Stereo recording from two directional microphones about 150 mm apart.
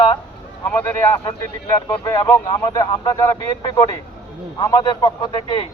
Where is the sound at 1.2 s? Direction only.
25° left (ahead or behind).